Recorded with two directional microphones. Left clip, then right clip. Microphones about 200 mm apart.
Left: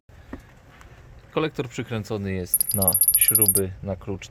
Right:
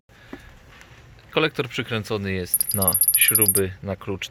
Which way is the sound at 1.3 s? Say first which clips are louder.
Right 4 dB; 5° left (ahead or behind).